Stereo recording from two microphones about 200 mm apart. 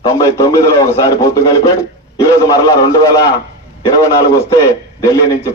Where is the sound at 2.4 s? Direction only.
20° left (ahead or behind).